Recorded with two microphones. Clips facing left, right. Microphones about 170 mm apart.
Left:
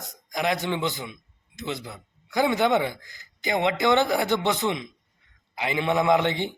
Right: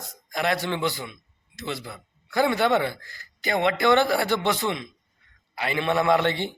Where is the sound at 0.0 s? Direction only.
20° left (ahead or behind).